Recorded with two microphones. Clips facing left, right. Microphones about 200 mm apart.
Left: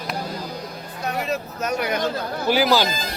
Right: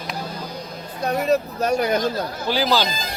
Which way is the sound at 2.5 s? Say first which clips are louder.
Left 2 dB; 15° left (ahead or behind).